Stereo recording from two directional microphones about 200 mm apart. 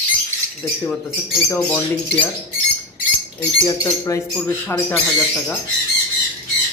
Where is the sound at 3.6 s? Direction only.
20° left (ahead or behind).